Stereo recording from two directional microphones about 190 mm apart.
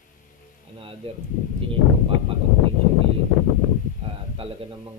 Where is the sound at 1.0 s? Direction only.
30° right (ahead or behind).